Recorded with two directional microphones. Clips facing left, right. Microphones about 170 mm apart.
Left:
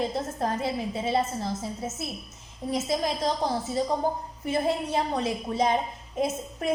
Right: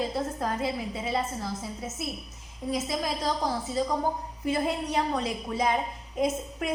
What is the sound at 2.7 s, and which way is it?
Speech, 25° left (ahead or behind).